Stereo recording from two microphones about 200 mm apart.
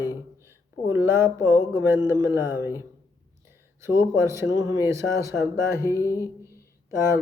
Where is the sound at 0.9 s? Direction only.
10° right (ahead or behind).